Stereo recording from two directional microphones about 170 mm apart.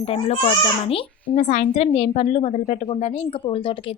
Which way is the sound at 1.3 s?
45° left (ahead or behind).